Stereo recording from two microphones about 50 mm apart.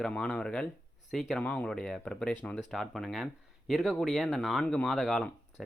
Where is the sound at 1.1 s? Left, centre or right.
Centre.